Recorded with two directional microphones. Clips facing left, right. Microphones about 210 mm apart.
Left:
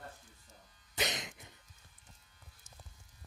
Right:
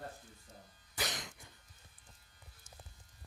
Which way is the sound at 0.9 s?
20° left (ahead or behind).